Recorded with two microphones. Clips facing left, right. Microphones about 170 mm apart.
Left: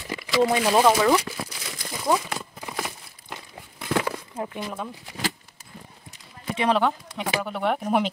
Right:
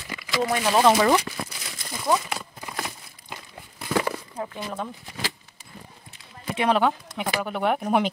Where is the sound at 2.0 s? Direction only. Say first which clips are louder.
Even; 10° left (ahead or behind).